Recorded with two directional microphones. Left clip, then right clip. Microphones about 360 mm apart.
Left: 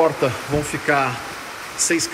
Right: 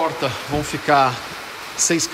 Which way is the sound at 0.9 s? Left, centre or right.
Centre.